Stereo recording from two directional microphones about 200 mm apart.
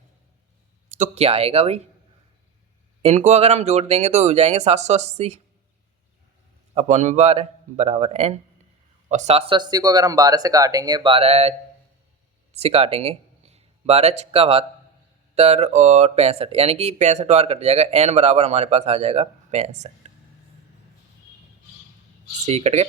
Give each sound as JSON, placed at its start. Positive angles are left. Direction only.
{"t": 0.9, "sound": "speech", "side_deg": -40}
{"t": 3.0, "sound": "speech", "side_deg": -35}
{"t": 6.7, "sound": "speech", "side_deg": -35}
{"t": 12.5, "sound": "speech", "side_deg": -30}
{"t": 22.4, "sound": "speech", "side_deg": -35}